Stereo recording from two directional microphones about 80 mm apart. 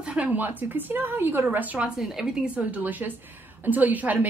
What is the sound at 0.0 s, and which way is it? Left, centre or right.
A woman's voice, centre.